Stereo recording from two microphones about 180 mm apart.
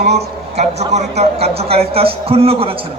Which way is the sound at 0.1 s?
35° right (ahead or behind).